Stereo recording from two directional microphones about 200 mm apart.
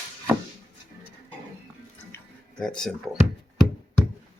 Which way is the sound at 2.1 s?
5° left (ahead or behind).